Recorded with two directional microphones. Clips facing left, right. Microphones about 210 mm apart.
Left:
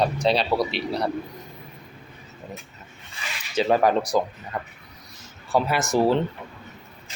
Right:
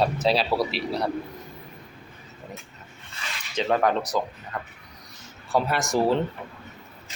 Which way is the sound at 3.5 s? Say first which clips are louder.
Left 3 dB; 10° left (ahead or behind).